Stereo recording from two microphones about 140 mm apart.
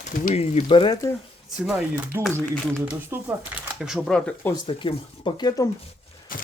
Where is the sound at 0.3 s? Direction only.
40° left (ahead or behind).